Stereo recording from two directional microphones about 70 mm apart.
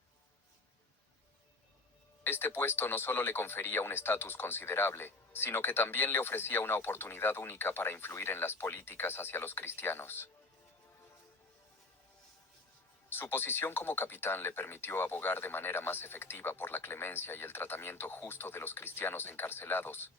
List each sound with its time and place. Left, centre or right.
2.2 s speech: left
13.1 s speech: left